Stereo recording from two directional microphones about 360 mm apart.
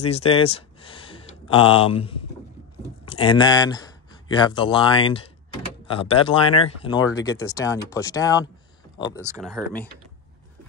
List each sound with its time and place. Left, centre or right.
0.0 s speech: centre
9.2 s speech: centre